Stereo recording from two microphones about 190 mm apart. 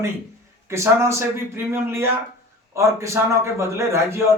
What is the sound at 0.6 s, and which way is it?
A man's voice, 15° right (ahead or behind).